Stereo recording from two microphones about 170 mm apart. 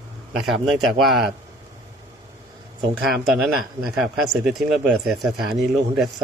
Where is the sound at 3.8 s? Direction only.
Centre (ahead or behind).